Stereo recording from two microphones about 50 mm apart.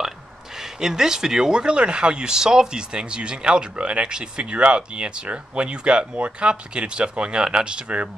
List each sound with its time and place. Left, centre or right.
0.6 s speech: centre